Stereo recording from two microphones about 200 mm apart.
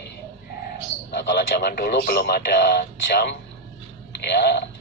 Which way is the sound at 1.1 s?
60° left (ahead or behind).